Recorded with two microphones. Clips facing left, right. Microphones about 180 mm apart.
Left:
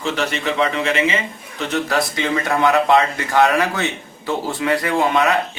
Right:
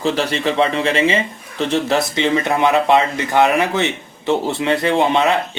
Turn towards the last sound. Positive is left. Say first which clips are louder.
# right 2 dB
turn(degrees=-25)  # may be behind; listen again after turning